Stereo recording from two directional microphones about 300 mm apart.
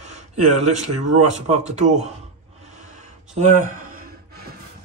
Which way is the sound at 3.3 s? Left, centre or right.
Right.